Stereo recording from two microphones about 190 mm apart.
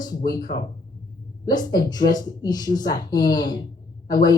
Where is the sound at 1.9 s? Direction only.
20° left (ahead or behind).